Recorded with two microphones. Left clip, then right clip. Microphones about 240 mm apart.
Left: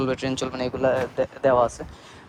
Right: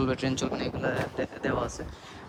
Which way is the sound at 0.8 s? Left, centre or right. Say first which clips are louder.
Left 11 dB; left.